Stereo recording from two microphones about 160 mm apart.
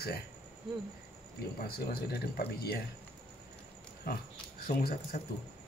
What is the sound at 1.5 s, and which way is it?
Speech, 70° left (ahead or behind).